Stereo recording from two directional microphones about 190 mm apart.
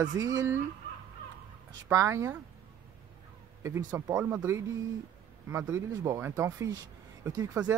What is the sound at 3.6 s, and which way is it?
Speech, 15° right (ahead or behind).